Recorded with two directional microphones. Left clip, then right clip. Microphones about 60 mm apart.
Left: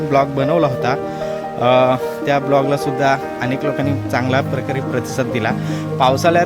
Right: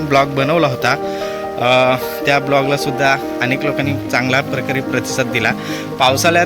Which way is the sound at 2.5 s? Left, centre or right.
Left.